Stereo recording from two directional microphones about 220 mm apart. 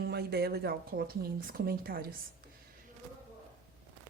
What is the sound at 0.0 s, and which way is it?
Speech, 45° right (ahead or behind).